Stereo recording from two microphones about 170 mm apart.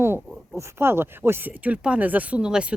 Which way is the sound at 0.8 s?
15° right (ahead or behind).